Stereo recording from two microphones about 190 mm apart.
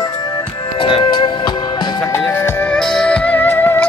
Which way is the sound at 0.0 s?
20° left (ahead or behind).